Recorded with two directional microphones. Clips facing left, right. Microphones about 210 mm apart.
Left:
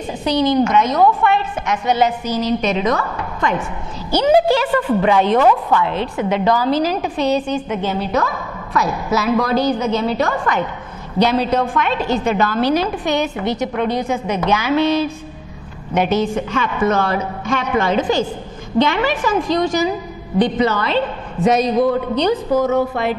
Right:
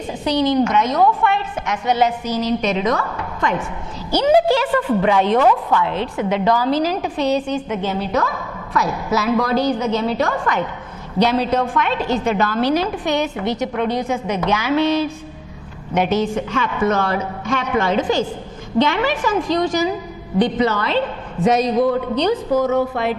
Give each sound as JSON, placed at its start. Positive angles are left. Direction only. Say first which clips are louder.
{"t": 0.2, "sound": "a woman's voice", "louder": "left 1 dB", "side_deg": 10}
{"t": 5.4, "sound": "a woman's voice", "louder": "left 1 dB", "side_deg": 25}
{"t": 5.8, "sound": "a woman's voice", "louder": "left 1 dB", "side_deg": 15}